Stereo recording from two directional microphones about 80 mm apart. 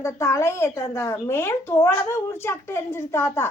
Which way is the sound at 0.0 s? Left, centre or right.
Left.